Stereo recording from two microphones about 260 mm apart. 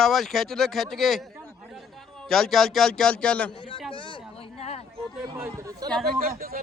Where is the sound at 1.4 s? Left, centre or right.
Centre.